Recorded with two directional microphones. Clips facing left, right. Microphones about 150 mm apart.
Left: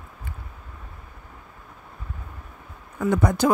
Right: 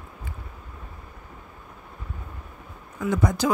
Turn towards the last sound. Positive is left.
turn(degrees=55)  # may be behind; listen again after turning